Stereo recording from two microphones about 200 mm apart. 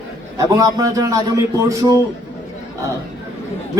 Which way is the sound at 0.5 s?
15° right (ahead or behind).